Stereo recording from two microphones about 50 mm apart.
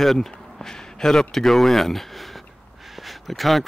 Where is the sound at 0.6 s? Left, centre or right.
Centre.